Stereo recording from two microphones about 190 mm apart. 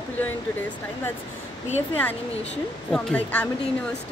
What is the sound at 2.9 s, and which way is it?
Speech, 5° left (ahead or behind).